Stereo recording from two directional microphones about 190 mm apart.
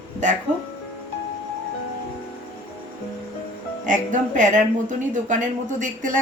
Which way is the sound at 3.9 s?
40° right (ahead or behind).